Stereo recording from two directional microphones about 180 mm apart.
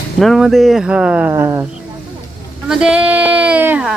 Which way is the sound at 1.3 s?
20° right (ahead or behind).